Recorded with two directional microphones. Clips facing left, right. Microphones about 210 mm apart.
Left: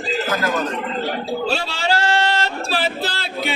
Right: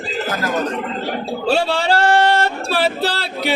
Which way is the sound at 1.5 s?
55° right (ahead or behind).